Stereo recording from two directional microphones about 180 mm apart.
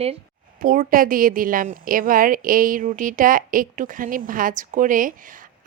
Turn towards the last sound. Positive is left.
turn(degrees=-50)  # may be behind; listen again after turning